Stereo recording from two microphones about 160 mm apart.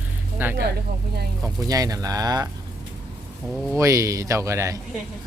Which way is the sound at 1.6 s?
20° right (ahead or behind).